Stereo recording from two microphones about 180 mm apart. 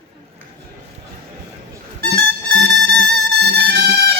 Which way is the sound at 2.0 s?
65° right (ahead or behind).